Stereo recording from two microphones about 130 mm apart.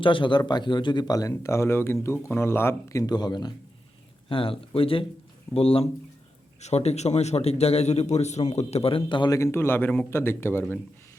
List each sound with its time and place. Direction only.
0.0 s a man's voice: 40° left (ahead or behind)
4.3 s a man's voice: 45° left (ahead or behind)
9.4 s speech: 20° left (ahead or behind)